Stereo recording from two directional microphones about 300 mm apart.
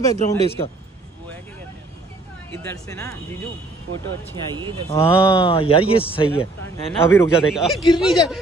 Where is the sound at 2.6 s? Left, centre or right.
Centre.